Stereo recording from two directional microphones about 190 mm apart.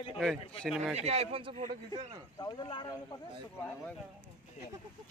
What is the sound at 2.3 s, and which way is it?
Speech, 20° left (ahead or behind).